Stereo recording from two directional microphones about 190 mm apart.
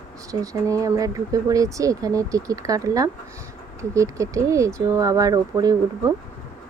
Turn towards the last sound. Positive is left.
turn(degrees=-20)  # may be behind; listen again after turning